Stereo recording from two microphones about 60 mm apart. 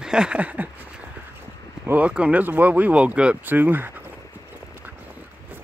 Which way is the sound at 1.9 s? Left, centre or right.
Right.